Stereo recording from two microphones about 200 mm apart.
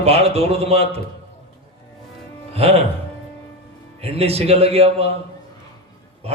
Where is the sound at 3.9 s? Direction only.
30° right (ahead or behind).